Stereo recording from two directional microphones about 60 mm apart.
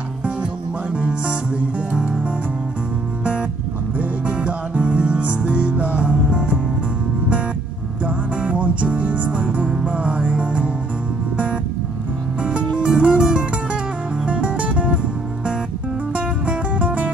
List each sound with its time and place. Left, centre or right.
0.9 s music: right
4.0 s music: centre
8.0 s music: right
12.4 s music: centre
16.2 s music: right